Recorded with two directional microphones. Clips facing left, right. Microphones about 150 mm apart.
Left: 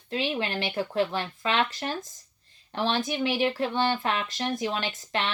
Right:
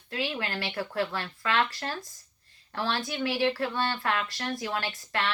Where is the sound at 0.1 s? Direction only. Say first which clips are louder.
Left 4 dB; 20° left (ahead or behind).